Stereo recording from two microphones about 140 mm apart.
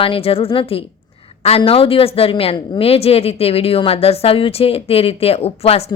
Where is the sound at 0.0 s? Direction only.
40° left (ahead or behind).